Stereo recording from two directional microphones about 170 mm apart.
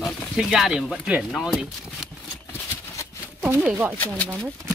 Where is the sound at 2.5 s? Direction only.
15° left (ahead or behind).